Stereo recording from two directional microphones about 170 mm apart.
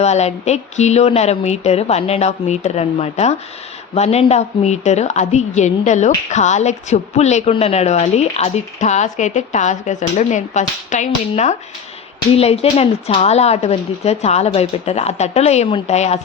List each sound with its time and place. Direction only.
0.0 s a woman's voice: 40° left (ahead or behind)